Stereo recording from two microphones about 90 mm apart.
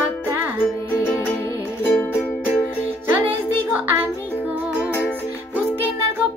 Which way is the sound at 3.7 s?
20° right (ahead or behind).